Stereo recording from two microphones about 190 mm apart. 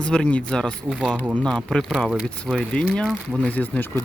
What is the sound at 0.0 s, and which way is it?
Speech, 5° left (ahead or behind).